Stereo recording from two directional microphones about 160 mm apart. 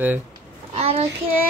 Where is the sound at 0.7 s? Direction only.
40° right (ahead or behind).